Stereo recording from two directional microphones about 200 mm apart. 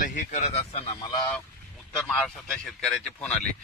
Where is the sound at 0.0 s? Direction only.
40° left (ahead or behind).